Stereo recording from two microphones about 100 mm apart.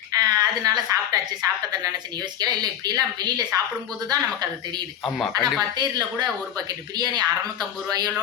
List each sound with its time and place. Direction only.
0.1 s a sound: 40° right (ahead or behind)
1.7 s speech: 40° right (ahead or behind)
5.0 s speech: centre (ahead or behind)
5.5 s speech: 45° right (ahead or behind)